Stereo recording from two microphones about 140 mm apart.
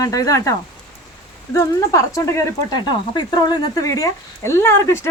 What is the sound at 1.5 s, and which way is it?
Speech, 25° left (ahead or behind).